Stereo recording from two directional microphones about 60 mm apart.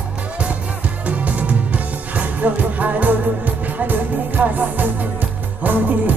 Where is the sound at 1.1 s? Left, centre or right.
Right.